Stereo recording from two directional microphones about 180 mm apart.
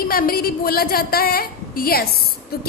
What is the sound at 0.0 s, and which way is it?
A woman's voice, 55° left (ahead or behind).